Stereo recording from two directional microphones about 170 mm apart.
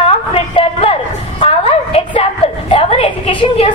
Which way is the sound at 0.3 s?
35° left (ahead or behind).